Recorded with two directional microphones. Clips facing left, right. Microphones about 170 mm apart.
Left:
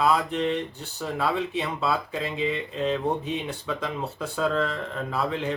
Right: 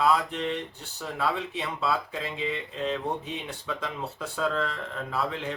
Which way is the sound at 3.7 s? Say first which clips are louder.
Left 2 dB; 20° left (ahead or behind).